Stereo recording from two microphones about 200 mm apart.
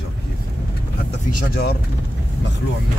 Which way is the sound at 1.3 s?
45° left (ahead or behind).